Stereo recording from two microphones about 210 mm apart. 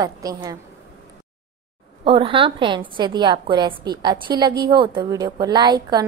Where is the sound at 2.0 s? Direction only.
25° right (ahead or behind).